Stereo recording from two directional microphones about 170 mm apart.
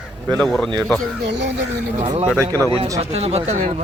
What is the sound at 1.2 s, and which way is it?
Speech, 90° right.